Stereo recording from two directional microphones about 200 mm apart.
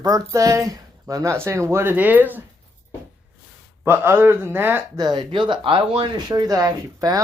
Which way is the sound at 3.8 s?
10° right (ahead or behind).